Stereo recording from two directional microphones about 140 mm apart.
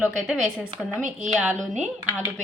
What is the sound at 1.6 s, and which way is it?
Speech, 55° right (ahead or behind).